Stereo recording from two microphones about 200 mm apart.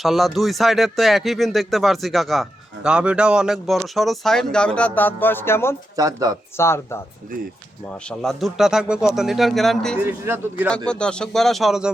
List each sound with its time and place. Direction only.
0.0 s speech: centre (ahead or behind)
4.9 s music: 10° left (ahead or behind)
6.0 s speech: 15° right (ahead or behind)
6.6 s music: 15° left (ahead or behind)
8.2 s speech: centre (ahead or behind)
10.0 s speech: 10° right (ahead or behind)
10.8 s speech: 5° left (ahead or behind)